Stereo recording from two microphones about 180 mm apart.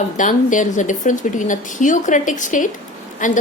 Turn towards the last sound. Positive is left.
turn(degrees=45)  # may be behind; listen again after turning